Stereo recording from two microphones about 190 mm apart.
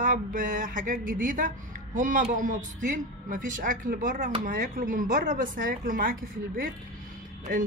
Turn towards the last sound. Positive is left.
turn(degrees=-45)  # may be behind; listen again after turning